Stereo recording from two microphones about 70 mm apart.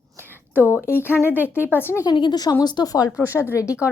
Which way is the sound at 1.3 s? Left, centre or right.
Right.